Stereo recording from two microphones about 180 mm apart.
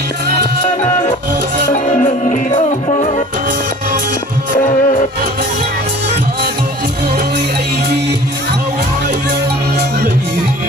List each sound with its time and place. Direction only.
1.7 s music: 45° left (ahead or behind)
4.5 s music: 45° left (ahead or behind)